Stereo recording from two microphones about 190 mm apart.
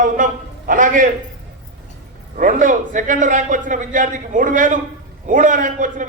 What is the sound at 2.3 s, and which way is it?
A man's voice, 45° right (ahead or behind).